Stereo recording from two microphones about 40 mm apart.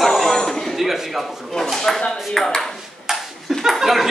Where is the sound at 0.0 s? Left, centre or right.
Centre.